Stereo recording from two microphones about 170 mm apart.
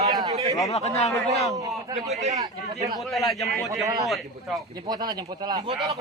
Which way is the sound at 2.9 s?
Centre (ahead or behind).